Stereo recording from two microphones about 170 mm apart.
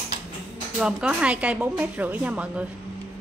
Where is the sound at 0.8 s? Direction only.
5° right (ahead or behind).